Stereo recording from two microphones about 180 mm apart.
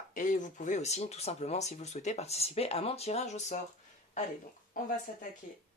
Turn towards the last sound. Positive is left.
turn(degrees=45)  # may be behind; listen again after turning